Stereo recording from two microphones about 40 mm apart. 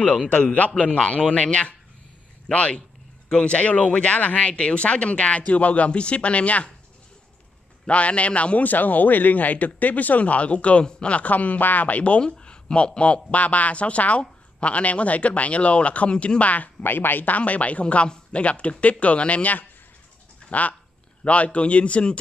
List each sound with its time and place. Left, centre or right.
0.3 s a man's voice: left
7.8 s a man's voice: left
12.2 s a man's voice: left
16.8 s speech: left
17.4 s a man's voice: left